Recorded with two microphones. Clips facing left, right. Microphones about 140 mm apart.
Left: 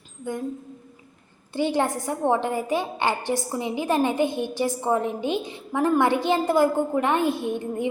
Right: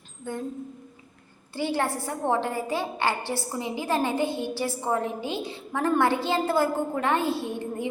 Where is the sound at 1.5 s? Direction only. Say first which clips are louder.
Left 4 dB; 20° left (ahead or behind).